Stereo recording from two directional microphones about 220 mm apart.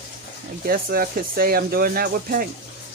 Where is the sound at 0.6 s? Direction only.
40° right (ahead or behind).